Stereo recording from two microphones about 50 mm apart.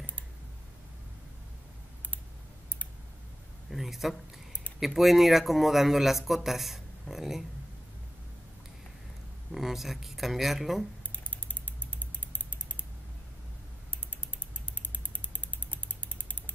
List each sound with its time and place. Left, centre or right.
3.7 s a man's voice: centre
9.5 s a man's voice: centre
11.1 s mechanisms: left
13.8 s mechanisms: left